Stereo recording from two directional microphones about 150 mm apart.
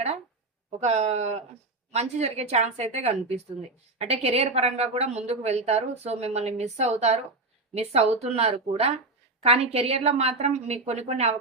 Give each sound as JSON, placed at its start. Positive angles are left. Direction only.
{"t": 0.8, "sound": "a woman's voice", "side_deg": -50}